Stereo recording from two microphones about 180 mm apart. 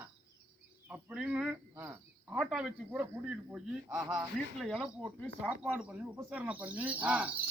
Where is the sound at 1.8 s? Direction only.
15° right (ahead or behind).